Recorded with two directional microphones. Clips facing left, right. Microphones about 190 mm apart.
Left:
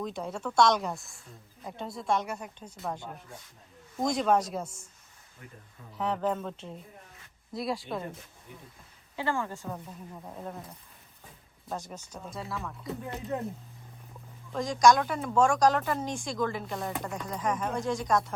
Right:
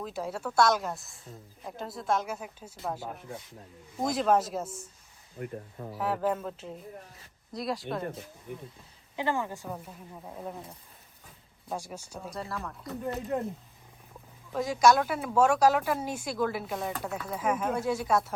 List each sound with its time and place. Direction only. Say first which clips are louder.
0.0 s a woman's voice: even; 5° right (ahead or behind)
6.0 s a woman's voice: even; 5° right (ahead or behind)
8.5 s speech: right 9 dB; 55° right (ahead or behind)
9.1 s a woman's voice: right 1 dB; 15° right (ahead or behind)
11.7 s a woman's voice: right 1 dB; 10° right (ahead or behind)
14.5 s speech: even; 5° right (ahead or behind)